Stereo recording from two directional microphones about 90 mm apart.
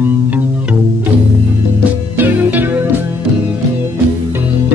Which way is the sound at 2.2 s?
20° right (ahead or behind).